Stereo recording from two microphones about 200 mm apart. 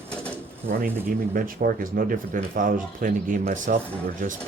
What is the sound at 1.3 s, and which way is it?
Speech, 45° right (ahead or behind).